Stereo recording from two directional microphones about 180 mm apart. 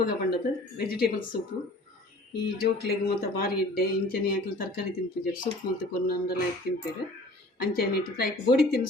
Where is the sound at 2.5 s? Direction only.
60° left (ahead or behind).